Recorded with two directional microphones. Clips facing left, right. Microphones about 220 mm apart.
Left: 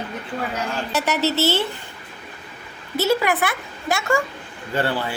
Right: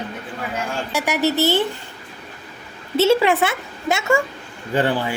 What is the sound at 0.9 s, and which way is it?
Speech, 10° right (ahead or behind).